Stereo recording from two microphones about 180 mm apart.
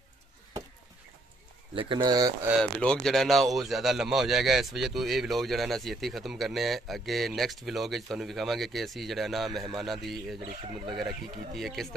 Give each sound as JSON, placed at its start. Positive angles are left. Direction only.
{"t": 1.8, "sound": "speech", "side_deg": -25}
{"t": 2.6, "sound": "a man's voice", "side_deg": 5}
{"t": 11.5, "sound": "a man's voice", "side_deg": 0}